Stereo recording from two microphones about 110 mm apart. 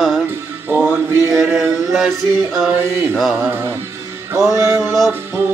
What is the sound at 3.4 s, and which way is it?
Music, 20° right (ahead or behind).